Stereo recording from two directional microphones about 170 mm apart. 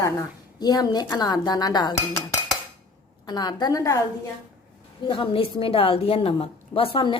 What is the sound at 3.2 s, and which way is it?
Speech, 25° left (ahead or behind).